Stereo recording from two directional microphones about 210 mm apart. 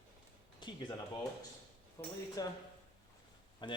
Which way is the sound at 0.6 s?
20° left (ahead or behind).